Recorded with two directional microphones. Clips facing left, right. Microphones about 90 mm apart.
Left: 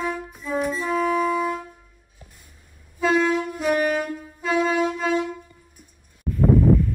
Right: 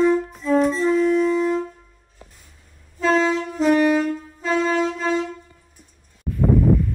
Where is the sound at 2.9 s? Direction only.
10° left (ahead or behind).